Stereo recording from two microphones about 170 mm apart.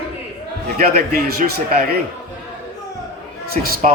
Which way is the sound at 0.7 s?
65° right (ahead or behind).